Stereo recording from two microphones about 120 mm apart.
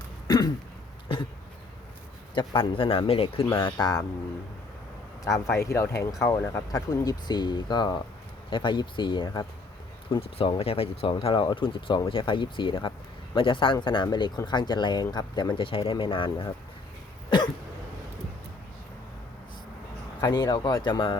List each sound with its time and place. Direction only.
0.3 s throat clearing: 35° left (ahead or behind)
2.3 s speech: 40° left (ahead or behind)
3.7 s speech: 35° left (ahead or behind)
5.2 s speech: 25° left (ahead or behind)
10.2 s speech: 55° left (ahead or behind)
17.2 s cough: 40° left (ahead or behind)
20.2 s speech: 35° left (ahead or behind)